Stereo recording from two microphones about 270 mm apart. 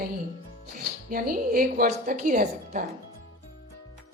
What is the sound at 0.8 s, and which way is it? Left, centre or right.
A woman's voice, right.